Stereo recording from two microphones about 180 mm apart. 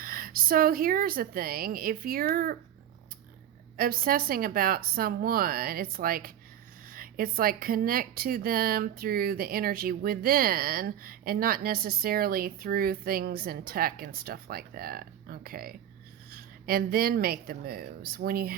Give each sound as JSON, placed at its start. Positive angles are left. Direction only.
{"t": 0.0, "sound": "a woman's voice", "side_deg": -55}
{"t": 3.8, "sound": "a woman's voice", "side_deg": -55}